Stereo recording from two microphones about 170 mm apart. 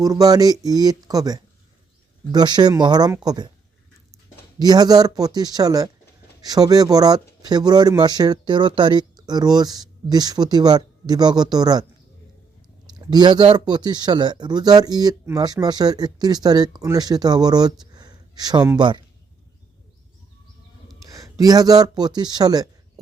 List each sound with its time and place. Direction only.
0.0 s speech: 20° right (ahead or behind)
4.6 s speech: 25° right (ahead or behind)
13.1 s speech: 25° right (ahead or behind)
21.0 s speech: 20° right (ahead or behind)